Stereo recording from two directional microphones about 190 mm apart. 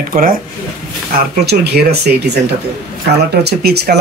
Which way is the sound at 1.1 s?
60° right (ahead or behind).